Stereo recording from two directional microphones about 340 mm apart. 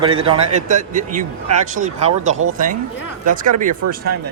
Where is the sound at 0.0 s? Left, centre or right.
Centre.